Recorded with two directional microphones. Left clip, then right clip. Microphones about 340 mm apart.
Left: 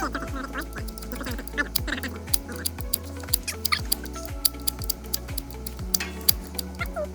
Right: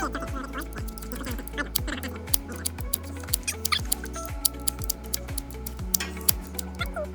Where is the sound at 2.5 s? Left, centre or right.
Centre.